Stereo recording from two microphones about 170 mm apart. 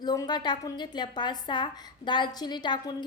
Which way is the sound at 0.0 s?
25° left (ahead or behind).